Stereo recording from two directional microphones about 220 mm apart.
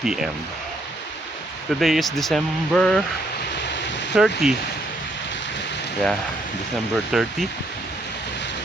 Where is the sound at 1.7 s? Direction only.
Centre (ahead or behind).